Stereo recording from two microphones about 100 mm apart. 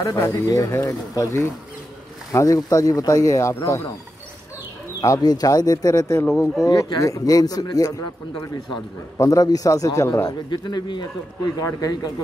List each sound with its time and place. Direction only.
0.0 s speech: 35° left (ahead or behind)
5.0 s speech: 35° left (ahead or behind)
9.2 s speech: 35° left (ahead or behind)
10.5 s a man's voice: 45° left (ahead or behind)